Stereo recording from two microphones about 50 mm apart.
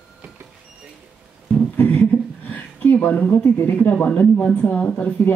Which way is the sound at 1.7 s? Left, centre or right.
Left.